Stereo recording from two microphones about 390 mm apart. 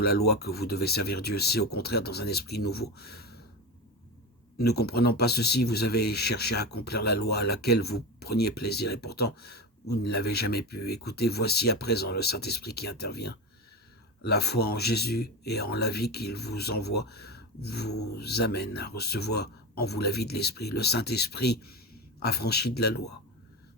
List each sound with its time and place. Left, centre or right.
0.0 s speech: left
4.5 s speech: left